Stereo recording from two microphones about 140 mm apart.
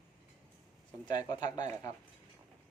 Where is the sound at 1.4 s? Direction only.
60° right (ahead or behind).